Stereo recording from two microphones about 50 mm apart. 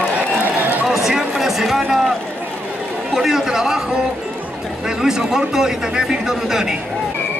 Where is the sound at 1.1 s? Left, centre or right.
Centre.